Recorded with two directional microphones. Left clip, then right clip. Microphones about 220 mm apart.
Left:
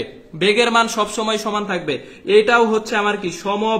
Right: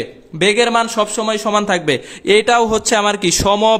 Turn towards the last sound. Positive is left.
turn(degrees=-45)  # may be behind; listen again after turning